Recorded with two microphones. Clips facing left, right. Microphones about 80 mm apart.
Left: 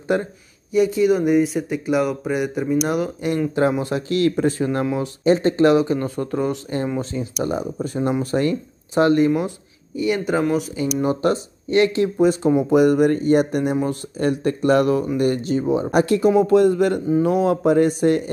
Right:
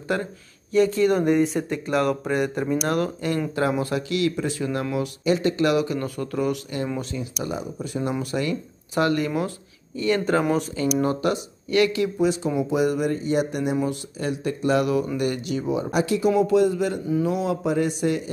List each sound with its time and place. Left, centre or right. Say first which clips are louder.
0.1 s speech: left 5 dB; left
0.7 s speech: left 2 dB; centre
4.1 s speech: left 9 dB; left
8.9 s speech: left 6 dB; left
9.9 s speech: left 1 dB; centre
11.2 s speech: left 4 dB; left
12.2 s speech: left 7 dB; left
15.9 s speech: left 5 dB; left